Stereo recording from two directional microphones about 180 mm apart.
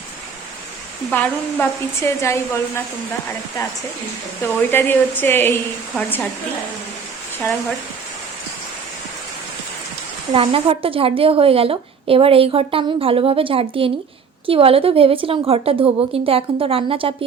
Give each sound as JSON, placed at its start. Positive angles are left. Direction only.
{"t": 1.1, "sound": "a woman's voice", "side_deg": 10}
{"t": 4.4, "sound": "a woman's voice", "side_deg": 10}
{"t": 10.3, "sound": "a woman's voice", "side_deg": -30}